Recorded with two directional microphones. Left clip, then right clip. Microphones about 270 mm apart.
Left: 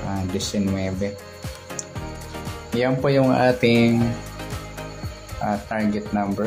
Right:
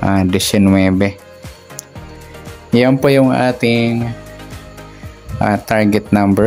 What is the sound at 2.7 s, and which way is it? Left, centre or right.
Speech, right.